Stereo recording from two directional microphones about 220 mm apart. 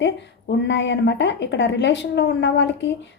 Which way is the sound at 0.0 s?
55° left (ahead or behind).